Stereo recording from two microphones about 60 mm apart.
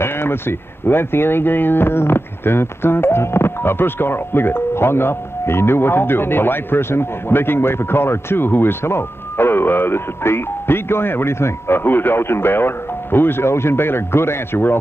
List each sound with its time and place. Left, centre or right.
0.0 s speech: left